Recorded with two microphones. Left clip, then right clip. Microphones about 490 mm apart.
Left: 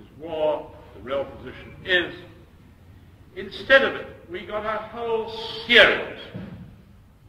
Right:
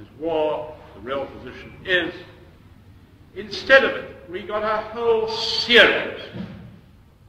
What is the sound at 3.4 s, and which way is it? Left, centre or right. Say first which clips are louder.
A man's voice: right 2 dB; right.